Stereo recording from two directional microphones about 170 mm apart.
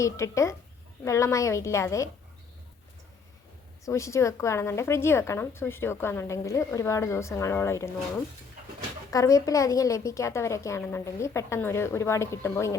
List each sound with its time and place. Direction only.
0.0 s a woman's voice: 15° left (ahead or behind)
3.8 s a woman's voice: 20° left (ahead or behind)
9.0 s a woman's voice: 20° left (ahead or behind)